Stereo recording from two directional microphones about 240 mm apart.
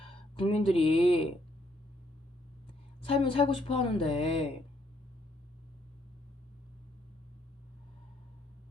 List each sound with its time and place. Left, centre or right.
0.3 s a woman's voice: left
3.1 s a woman's voice: left